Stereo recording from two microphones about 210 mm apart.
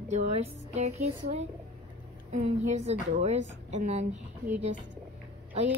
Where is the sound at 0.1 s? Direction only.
30° right (ahead or behind).